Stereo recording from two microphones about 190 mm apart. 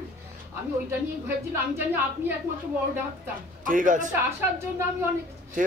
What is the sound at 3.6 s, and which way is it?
Speech, 45° right (ahead or behind).